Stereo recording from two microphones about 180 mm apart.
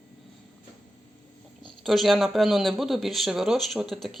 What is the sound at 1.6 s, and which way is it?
Speech, centre (ahead or behind).